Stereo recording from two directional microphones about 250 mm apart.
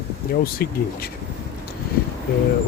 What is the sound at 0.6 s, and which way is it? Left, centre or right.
Speech, left.